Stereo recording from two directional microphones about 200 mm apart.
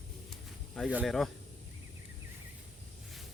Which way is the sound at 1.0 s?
Centre (ahead or behind).